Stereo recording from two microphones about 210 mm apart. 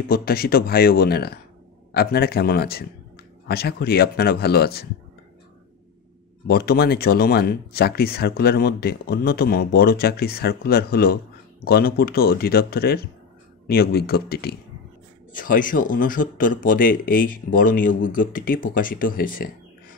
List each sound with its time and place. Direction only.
0.1 s speech: 45° left (ahead or behind)
6.4 s speech: 45° left (ahead or behind)